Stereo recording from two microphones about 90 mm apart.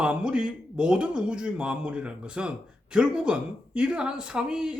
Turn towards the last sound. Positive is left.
turn(degrees=-10)  # may be behind; listen again after turning